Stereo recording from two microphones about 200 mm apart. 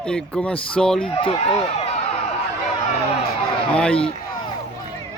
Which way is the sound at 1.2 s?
30° left (ahead or behind).